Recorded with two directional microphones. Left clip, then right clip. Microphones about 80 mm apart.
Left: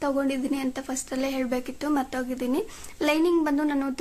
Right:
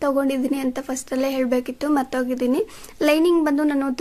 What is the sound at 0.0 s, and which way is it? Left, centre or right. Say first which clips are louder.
Speech: right 5 dB; right.